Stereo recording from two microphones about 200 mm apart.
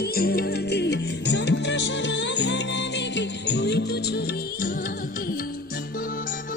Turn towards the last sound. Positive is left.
turn(degrees=50)  # may be behind; listen again after turning